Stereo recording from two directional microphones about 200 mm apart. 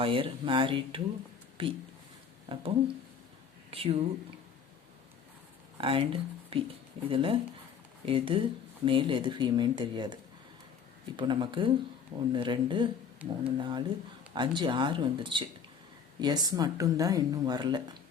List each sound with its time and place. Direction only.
0.0 s speech: 25° right (ahead or behind)
5.7 s speech: 25° right (ahead or behind)